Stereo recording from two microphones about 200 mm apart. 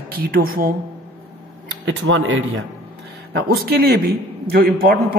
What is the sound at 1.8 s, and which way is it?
Speech, 70° right (ahead or behind).